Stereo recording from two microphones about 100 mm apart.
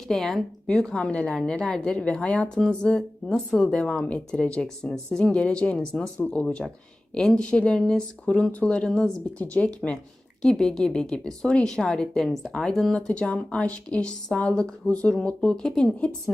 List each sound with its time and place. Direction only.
0.1 s speech: centre (ahead or behind)